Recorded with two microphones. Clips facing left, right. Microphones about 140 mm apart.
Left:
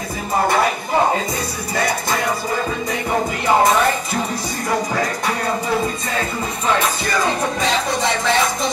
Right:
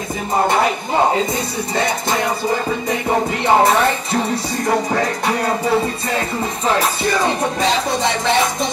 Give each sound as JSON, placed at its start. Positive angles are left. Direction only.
{"t": 1.8, "sound": "music", "side_deg": -25}
{"t": 3.4, "sound": "music", "side_deg": -30}